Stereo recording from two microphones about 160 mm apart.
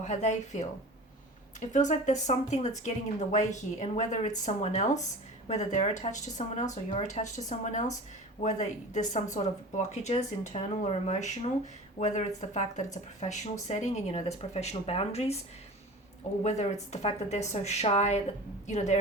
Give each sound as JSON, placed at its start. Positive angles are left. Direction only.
{"t": 0.0, "sound": "speech", "side_deg": 50}
{"t": 16.4, "sound": "speech", "side_deg": 45}